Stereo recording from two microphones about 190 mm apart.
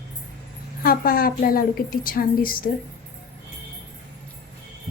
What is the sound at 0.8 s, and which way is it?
A woman's voice, 50° left (ahead or behind).